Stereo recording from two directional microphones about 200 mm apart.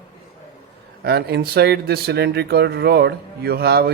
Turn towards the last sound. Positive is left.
turn(degrees=-55)  # may be behind; listen again after turning